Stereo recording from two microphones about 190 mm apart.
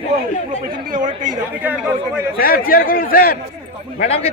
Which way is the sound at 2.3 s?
50° left (ahead or behind).